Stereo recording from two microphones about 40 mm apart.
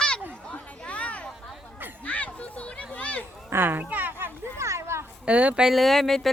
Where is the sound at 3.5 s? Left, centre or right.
Right.